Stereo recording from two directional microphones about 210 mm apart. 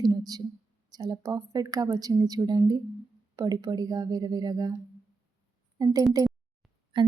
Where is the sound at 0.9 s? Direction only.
20° right (ahead or behind).